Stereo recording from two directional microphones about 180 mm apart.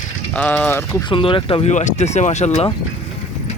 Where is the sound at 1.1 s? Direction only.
30° left (ahead or behind).